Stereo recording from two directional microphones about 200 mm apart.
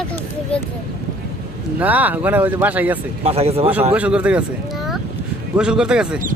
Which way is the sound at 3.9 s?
5° right (ahead or behind).